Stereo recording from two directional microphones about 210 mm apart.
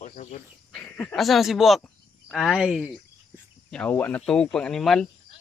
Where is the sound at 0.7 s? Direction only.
5° left (ahead or behind).